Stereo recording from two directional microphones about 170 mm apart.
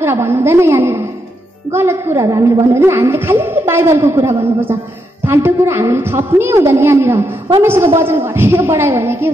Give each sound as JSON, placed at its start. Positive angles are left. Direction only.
{"t": 0.0, "sound": "a woman's voice", "side_deg": -15}